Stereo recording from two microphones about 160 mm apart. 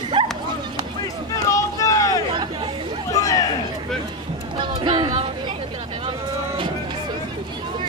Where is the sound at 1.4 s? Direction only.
20° left (ahead or behind).